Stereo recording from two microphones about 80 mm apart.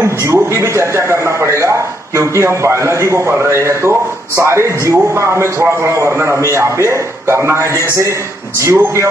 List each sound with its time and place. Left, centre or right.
0.0 s a man's voice: right